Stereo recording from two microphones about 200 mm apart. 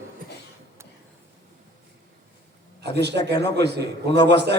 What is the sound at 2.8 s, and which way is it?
A man's voice, 55° right (ahead or behind).